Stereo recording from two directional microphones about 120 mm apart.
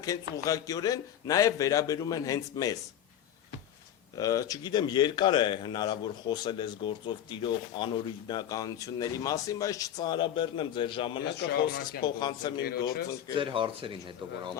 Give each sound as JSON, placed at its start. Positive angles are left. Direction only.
{"t": 0.0, "sound": "a man's voice", "side_deg": 30}
{"t": 4.2, "sound": "speech", "side_deg": 30}
{"t": 13.3, "sound": "speech", "side_deg": -45}